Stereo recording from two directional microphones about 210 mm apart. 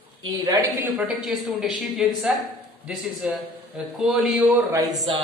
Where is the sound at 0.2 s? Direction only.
15° right (ahead or behind); by 1.7 s centre (ahead or behind).